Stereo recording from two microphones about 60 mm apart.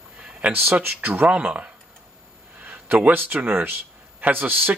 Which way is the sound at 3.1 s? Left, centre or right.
Right.